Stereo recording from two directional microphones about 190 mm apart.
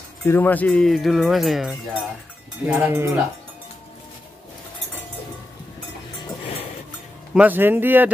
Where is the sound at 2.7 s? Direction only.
10° right (ahead or behind).